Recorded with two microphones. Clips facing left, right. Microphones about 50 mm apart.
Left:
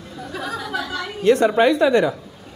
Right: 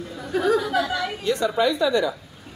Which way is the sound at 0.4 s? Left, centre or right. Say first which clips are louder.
Right 8 dB; right.